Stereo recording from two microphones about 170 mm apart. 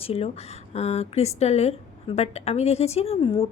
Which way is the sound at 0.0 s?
35° left (ahead or behind).